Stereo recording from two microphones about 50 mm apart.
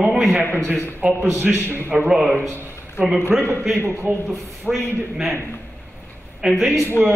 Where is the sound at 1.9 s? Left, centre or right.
Centre.